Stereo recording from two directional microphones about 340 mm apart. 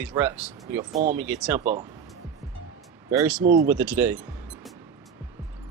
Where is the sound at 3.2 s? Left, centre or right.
Centre.